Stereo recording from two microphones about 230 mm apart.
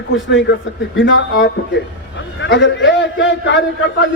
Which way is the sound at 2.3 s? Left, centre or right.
Left.